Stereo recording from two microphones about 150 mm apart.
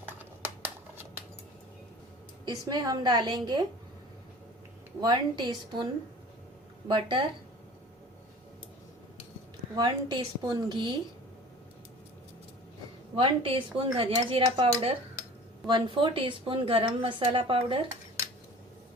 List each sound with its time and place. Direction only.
0.4 s a sound: 15° right (ahead or behind)
2.4 s a woman's voice: 25° right (ahead or behind)
4.9 s a woman's voice: 30° right (ahead or behind)
9.7 s a woman's voice: 25° right (ahead or behind)
13.1 s a woman's voice: 35° right (ahead or behind)